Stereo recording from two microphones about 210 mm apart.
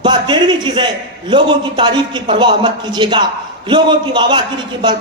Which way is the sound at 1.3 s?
25° right (ahead or behind).